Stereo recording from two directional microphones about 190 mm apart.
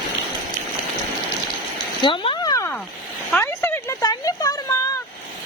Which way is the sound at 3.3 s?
10° left (ahead or behind).